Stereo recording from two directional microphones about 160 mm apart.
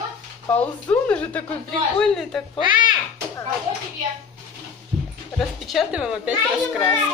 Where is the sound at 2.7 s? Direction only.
30° right (ahead or behind).